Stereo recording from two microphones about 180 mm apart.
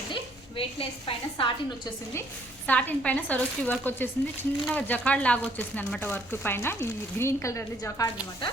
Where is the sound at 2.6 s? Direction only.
10° left (ahead or behind).